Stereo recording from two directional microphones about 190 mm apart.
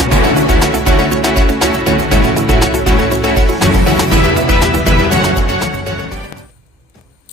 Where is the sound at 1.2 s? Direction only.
Centre (ahead or behind).